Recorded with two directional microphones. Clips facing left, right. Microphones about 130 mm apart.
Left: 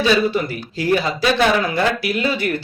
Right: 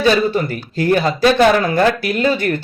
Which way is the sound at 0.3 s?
50° right (ahead or behind).